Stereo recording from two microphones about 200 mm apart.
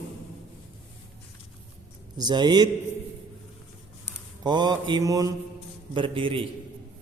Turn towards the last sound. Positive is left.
turn(degrees=-25)  # may be behind; listen again after turning